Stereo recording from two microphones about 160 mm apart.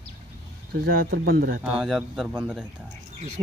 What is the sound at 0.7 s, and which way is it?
Speech, 70° right (ahead or behind).